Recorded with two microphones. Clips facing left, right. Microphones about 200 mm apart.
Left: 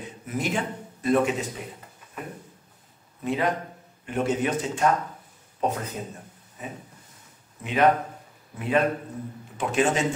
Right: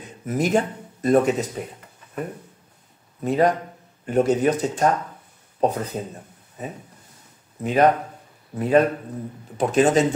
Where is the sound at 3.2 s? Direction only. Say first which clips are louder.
Right 6 dB; 40° right (ahead or behind).